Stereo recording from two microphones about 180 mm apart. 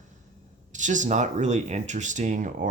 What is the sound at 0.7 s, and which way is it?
Speech, 45° right (ahead or behind).